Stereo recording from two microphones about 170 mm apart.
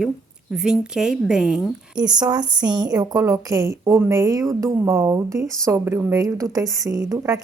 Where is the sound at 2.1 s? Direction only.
25° right (ahead or behind).